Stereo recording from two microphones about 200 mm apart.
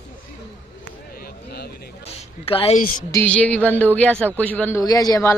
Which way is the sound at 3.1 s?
5° left (ahead or behind).